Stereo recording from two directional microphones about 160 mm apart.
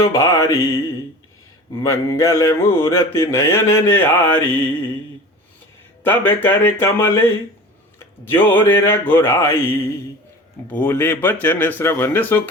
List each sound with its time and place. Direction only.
0.0 s music: 20° left (ahead or behind)
1.7 s mantra: 20° left (ahead or behind)
6.0 s mantra: 10° left (ahead or behind)